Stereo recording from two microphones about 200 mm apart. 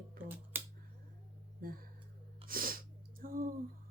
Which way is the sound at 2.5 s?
45° right (ahead or behind).